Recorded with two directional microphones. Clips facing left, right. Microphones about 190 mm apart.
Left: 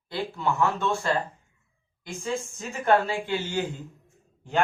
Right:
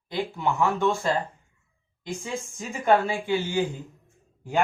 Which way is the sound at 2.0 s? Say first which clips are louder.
Left 1 dB; 15° right (ahead or behind).